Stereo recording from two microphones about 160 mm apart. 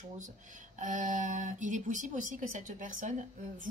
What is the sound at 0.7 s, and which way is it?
A woman's voice, 50° right (ahead or behind).